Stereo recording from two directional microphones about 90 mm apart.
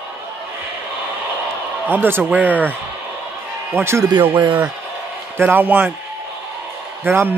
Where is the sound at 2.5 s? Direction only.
15° left (ahead or behind).